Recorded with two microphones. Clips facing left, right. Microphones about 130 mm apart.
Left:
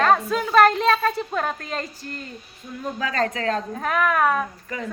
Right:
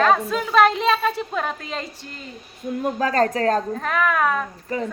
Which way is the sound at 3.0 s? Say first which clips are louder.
Right 4 dB; 40° right (ahead or behind).